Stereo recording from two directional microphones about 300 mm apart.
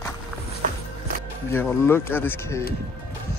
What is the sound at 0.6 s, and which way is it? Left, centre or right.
Music, right.